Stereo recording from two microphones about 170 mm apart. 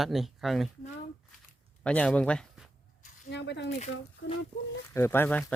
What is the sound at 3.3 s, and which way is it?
Speech, 90° left.